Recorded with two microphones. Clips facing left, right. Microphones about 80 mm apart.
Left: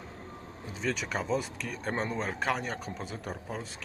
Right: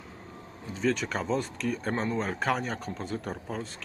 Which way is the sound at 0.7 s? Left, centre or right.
Centre.